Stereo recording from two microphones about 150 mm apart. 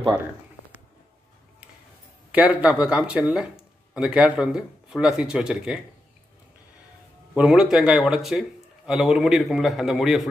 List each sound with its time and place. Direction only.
2.3 s speech: 10° right (ahead or behind)
7.3 s speech: 5° right (ahead or behind)